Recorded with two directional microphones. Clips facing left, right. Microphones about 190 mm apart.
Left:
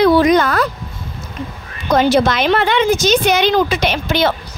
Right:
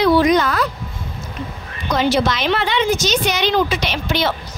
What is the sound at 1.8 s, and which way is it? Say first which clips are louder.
A woman's voice: left 4 dB; 50° left (ahead or behind).